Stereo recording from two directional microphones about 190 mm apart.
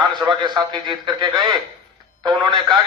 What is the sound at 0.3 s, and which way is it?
A man's voice, 25° right (ahead or behind).